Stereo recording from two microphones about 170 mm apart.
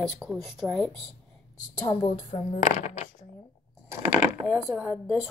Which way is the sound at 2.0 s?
40° left (ahead or behind).